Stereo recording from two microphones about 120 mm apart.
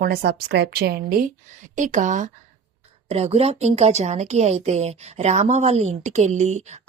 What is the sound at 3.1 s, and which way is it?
A woman's voice, 60° right (ahead or behind).